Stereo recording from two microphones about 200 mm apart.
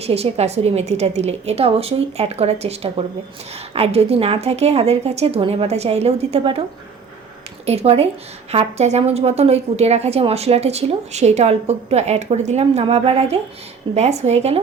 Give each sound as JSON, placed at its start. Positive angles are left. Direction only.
{"t": 0.0, "sound": "a woman's voice", "side_deg": -30}
{"t": 7.6, "sound": "a woman's voice", "side_deg": -30}